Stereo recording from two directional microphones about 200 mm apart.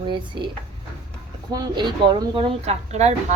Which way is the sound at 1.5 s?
20° right (ahead or behind).